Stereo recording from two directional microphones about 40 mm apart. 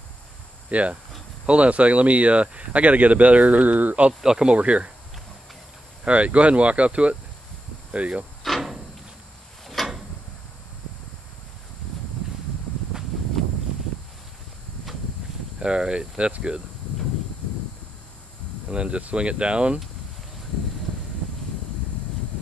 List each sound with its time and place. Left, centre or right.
0.7 s speech: right
4.2 s speech: centre
4.5 s speech: right
6.0 s speech: right
8.5 s a sound: centre
15.6 s speech: right
18.7 s speech: right